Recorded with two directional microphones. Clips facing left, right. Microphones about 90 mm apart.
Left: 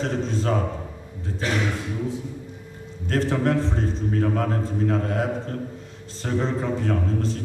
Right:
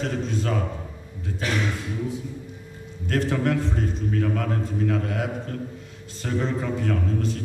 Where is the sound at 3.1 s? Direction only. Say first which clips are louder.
Left 1 dB; 35° left (ahead or behind).